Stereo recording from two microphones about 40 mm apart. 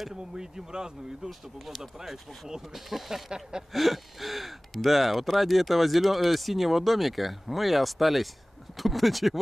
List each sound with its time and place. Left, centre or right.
0.1 s speech: centre
3.3 s speech: centre
3.7 s speech: centre